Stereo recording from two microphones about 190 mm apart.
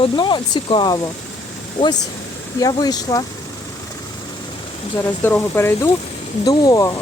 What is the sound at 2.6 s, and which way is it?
Speech, 20° left (ahead or behind).